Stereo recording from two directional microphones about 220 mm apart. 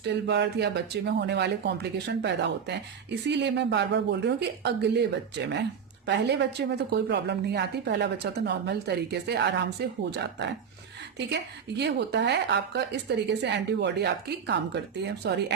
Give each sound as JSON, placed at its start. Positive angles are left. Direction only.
{"t": 0.0, "sound": "a woman's voice", "side_deg": -50}
{"t": 11.8, "sound": "a woman's voice", "side_deg": -50}